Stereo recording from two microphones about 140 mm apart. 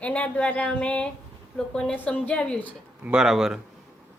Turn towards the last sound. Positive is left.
turn(degrees=-5)  # may be behind; listen again after turning